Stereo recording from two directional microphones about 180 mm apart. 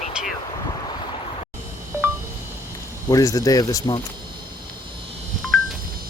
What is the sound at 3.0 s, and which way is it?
Speech, 20° left (ahead or behind).